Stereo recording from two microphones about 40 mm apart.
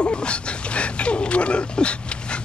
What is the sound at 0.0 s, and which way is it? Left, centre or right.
Speech, left.